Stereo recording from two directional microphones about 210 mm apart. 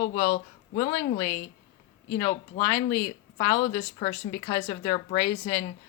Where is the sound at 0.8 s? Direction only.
25° left (ahead or behind).